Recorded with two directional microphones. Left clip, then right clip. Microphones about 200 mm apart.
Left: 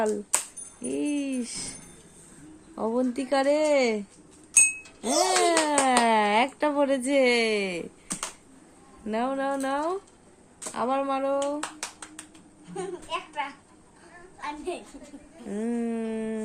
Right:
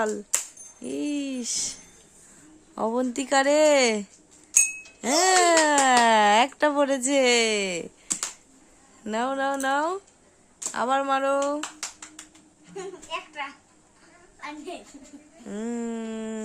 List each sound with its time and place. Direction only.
0.8 s speech: 25° right (ahead or behind)
2.7 s speech: 30° right (ahead or behind)
5.1 s speech: 30° right (ahead or behind)
9.0 s speech: 30° right (ahead or behind)
12.7 s a woman's voice: 20° left (ahead or behind)
14.4 s a woman's voice: 30° left (ahead or behind)
15.4 s speech: 25° right (ahead or behind)